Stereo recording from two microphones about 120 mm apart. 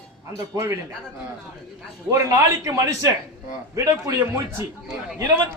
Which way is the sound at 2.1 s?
25° right (ahead or behind).